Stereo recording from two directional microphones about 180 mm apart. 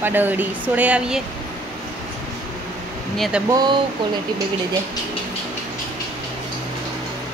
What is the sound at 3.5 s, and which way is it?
Speech, 25° right (ahead or behind).